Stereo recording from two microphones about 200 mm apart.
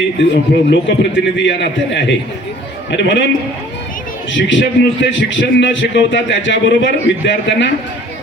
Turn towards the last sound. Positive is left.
turn(degrees=65)  # may be behind; listen again after turning